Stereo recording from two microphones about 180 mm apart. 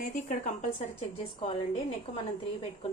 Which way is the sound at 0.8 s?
35° left (ahead or behind).